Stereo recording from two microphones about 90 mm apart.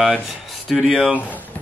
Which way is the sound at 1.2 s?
20° left (ahead or behind).